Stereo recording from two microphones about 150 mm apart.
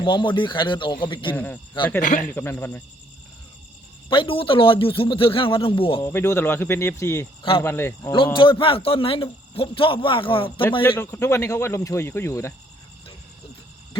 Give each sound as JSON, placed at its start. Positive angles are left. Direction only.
{"t": 0.0, "sound": "a man's voice", "side_deg": 30}
{"t": 2.0, "sound": "a man's voice", "side_deg": 60}
{"t": 2.3, "sound": "speech", "side_deg": 15}
{"t": 4.1, "sound": "a man's voice", "side_deg": 35}
{"t": 6.0, "sound": "speech", "side_deg": 15}
{"t": 8.1, "sound": "a man's voice", "side_deg": 35}
{"t": 10.8, "sound": "speech", "side_deg": 15}